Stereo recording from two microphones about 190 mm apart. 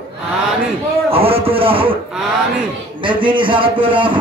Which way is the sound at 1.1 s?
30° right (ahead or behind).